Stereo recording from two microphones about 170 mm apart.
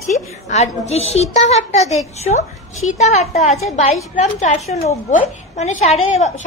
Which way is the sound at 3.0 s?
40° left (ahead or behind).